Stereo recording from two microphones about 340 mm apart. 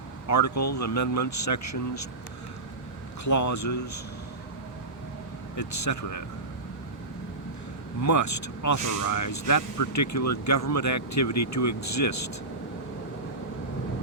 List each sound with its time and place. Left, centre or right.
0.3 s speech: left
3.2 s speech: left
5.5 s speech: left
8.0 s speech: left